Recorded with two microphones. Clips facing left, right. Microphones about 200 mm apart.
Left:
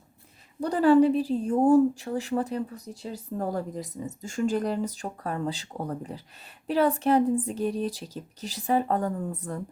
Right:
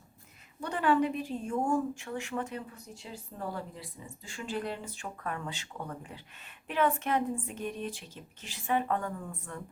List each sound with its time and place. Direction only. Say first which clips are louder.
0.6 s a woman's voice: left 9 dB; 35° left (ahead or behind)